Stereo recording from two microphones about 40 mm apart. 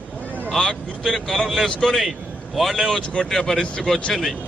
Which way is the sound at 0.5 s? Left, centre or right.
Centre.